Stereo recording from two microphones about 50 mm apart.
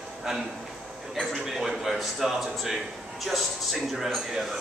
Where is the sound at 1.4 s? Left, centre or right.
Centre.